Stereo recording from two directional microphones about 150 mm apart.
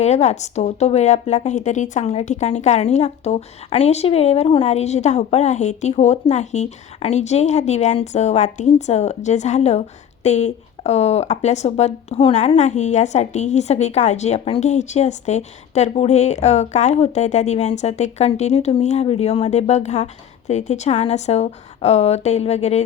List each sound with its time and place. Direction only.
0.0 s a woman's voice: 50° left (ahead or behind)